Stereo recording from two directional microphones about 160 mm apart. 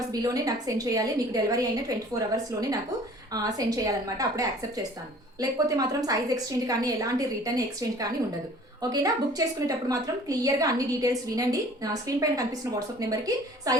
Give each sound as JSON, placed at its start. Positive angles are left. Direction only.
{"t": 0.1, "sound": "a woman's voice", "side_deg": -20}